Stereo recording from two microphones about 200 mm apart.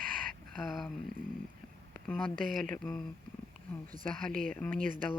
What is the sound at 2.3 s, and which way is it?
Speech, 45° right (ahead or behind).